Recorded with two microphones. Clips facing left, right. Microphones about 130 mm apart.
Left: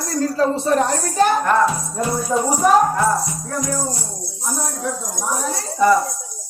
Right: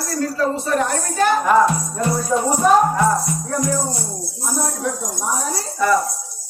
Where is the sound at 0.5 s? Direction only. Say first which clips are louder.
Left 2 dB; 35° left (ahead or behind).